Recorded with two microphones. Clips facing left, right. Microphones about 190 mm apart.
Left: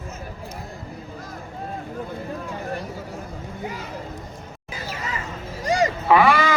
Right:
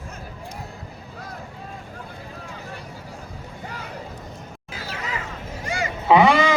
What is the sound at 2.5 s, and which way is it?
Vehicle, 55° left (ahead or behind).